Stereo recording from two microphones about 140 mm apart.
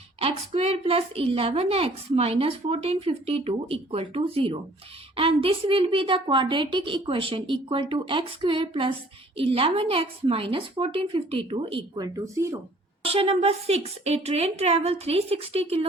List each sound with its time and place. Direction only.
0.2 s a woman's voice: 50° right (ahead or behind); by 12.5 s 20° right (ahead or behind)
13.0 s a woman's voice: 45° right (ahead or behind)